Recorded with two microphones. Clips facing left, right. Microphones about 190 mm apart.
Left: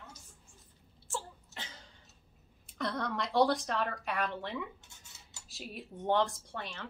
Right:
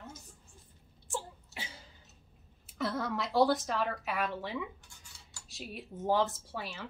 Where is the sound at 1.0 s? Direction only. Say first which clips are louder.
Right 1 dB; 15° right (ahead or behind).